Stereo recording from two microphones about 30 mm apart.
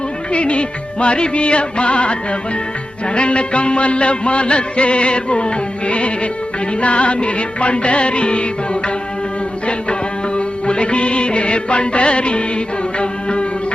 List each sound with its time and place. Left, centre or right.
0.3 s music: left
3.2 s music: left
10.3 s music: left